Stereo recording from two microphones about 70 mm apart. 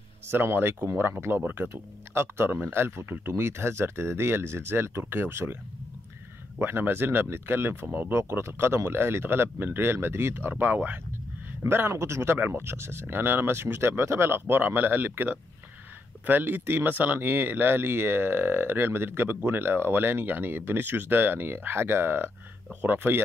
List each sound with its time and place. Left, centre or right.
0.3 s speech: right
6.6 s speech: right
11.6 s speech: right